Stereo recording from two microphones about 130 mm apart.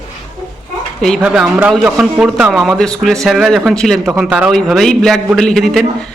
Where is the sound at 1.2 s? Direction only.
5° right (ahead or behind).